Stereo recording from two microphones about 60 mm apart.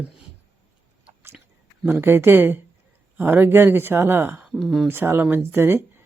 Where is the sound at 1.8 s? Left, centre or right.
Right.